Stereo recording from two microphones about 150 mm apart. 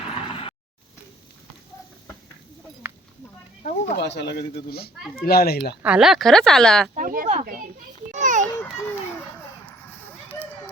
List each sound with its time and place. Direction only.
0.1 s mechanisms: 40° left (ahead or behind)
2.8 s a sound: 10° right (ahead or behind)
3.6 s speech: 75° left (ahead or behind); by 5.7 s 90° left
5.8 s speech: 5° right (ahead or behind)
6.9 s speech: 65° right (ahead or behind)
8.1 s children playing: 55° right (ahead or behind)